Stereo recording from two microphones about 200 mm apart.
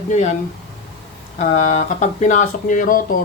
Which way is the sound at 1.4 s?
35° left (ahead or behind).